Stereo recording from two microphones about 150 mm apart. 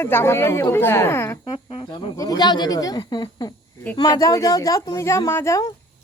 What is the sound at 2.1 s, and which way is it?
Speech, 25° left (ahead or behind).